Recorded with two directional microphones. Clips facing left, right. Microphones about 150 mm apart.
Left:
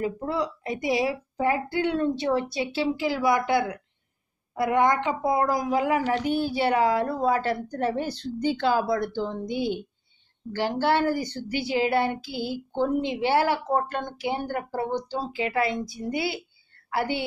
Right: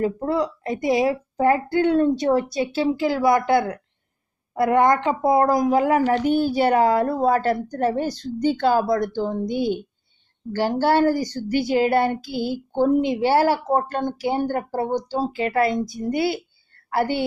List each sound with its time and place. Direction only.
0.0 s a woman's voice: 50° right (ahead or behind)